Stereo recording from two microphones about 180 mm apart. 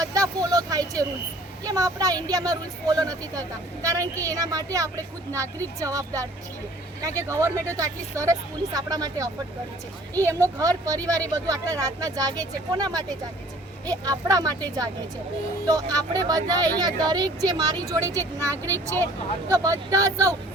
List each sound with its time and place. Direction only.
0.0 s speech: 20° right (ahead or behind)